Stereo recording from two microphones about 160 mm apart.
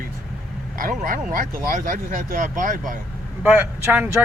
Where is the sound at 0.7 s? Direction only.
60° right (ahead or behind).